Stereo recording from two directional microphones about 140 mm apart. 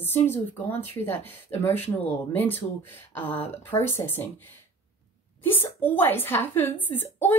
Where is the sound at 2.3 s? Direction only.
15° left (ahead or behind).